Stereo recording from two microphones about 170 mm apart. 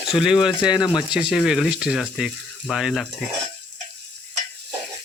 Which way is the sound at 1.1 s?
5° right (ahead or behind).